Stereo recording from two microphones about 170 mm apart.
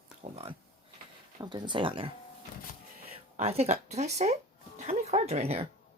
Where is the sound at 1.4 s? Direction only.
25° right (ahead or behind).